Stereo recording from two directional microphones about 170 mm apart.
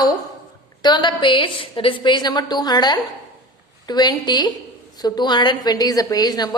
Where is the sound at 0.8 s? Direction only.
25° left (ahead or behind).